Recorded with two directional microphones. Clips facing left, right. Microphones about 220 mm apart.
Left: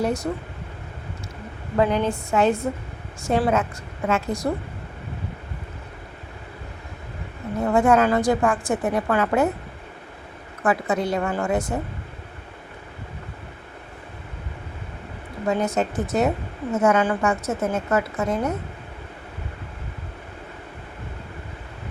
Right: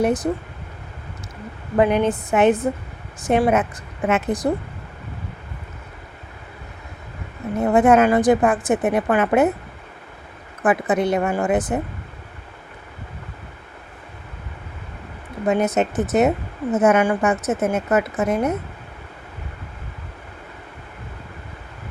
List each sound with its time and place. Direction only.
0.0 s speech: 20° right (ahead or behind)
1.7 s a woman's voice: 20° right (ahead or behind)
7.6 s a woman's voice: 20° right (ahead or behind)
10.6 s a woman's voice: 20° right (ahead or behind)
15.4 s a woman's voice: 20° right (ahead or behind)